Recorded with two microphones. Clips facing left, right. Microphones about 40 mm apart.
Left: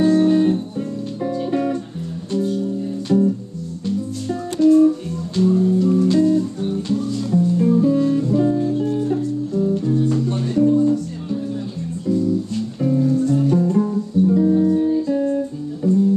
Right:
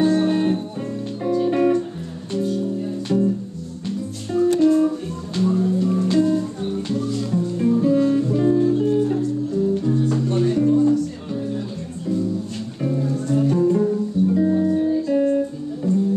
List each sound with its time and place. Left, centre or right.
0.2 s music: centre
3.1 s music: centre
4.6 s music: centre
12.1 s music: centre
15.1 s music: centre
15.8 s music: centre